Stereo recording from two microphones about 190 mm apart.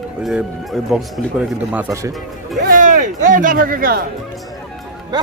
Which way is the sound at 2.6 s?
45° right (ahead or behind).